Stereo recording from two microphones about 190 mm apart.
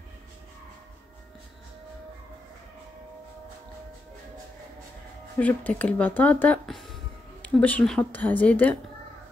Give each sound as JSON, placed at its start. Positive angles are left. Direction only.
{"t": 5.4, "sound": "speech", "side_deg": 10}